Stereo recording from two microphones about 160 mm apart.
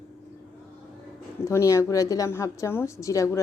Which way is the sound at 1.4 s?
20° left (ahead or behind).